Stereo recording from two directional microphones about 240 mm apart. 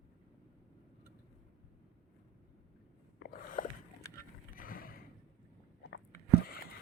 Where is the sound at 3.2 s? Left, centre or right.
Left.